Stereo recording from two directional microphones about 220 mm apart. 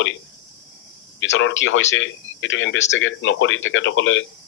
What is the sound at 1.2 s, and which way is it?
A man's voice, 60° left (ahead or behind).